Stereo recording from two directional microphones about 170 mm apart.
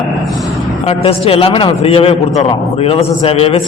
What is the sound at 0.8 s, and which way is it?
A man's voice, 35° left (ahead or behind).